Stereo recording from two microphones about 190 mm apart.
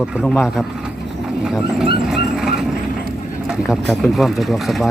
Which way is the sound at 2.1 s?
Centre (ahead or behind).